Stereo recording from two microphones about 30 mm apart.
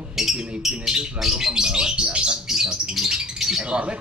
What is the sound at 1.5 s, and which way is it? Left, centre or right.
Bird, right.